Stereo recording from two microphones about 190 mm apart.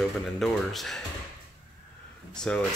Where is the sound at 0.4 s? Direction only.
Centre (ahead or behind).